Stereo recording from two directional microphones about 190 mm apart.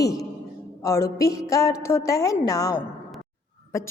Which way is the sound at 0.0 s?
20° left (ahead or behind).